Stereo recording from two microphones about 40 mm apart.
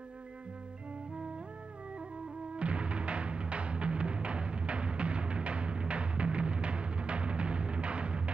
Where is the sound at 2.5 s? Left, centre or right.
Right.